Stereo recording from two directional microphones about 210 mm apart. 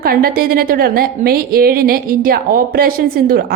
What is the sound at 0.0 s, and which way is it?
A woman's voice, 45° right (ahead or behind).